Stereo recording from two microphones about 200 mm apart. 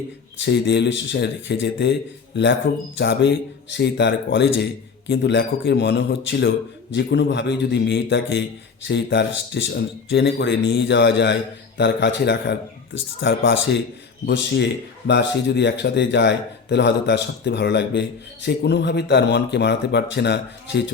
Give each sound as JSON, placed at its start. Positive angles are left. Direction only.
{"t": 0.3, "sound": "a man's voice", "side_deg": 60}